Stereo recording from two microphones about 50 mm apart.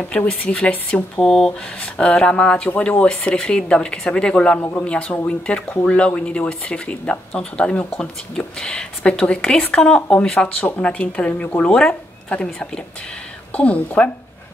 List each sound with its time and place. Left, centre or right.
0.4 s speech: left
1.1 s speech: centre
4.6 s a man's voice: left
4.8 s a woman's voice: left